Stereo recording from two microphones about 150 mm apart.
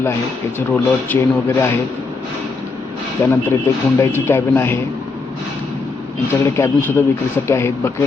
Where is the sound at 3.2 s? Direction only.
15° left (ahead or behind).